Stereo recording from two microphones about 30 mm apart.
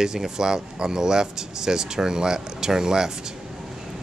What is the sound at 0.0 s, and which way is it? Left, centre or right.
Speech, right.